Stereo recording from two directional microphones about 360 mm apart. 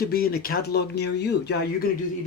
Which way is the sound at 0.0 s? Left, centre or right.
Left.